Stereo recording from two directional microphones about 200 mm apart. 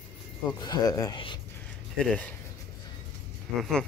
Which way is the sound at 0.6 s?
20° left (ahead or behind).